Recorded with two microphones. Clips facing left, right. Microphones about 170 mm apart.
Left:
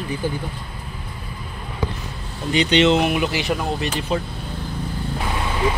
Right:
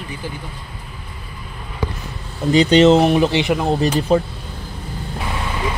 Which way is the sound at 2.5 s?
40° right (ahead or behind).